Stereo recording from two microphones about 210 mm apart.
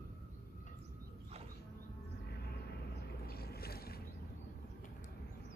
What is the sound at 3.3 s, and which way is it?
Boat, 45° left (ahead or behind).